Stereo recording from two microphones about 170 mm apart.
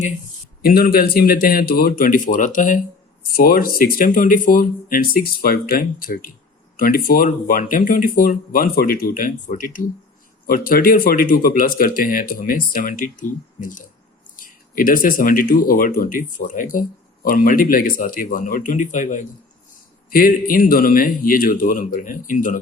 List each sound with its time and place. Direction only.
0.6 s speech: 60° left (ahead or behind)